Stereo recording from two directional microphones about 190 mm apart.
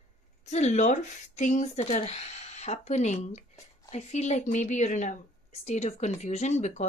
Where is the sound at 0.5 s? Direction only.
40° left (ahead or behind).